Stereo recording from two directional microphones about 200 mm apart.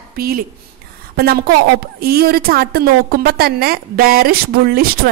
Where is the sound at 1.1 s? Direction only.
50° right (ahead or behind).